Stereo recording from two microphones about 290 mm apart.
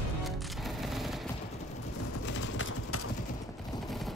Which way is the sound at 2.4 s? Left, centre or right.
Left.